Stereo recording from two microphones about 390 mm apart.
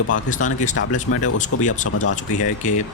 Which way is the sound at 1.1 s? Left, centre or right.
Left.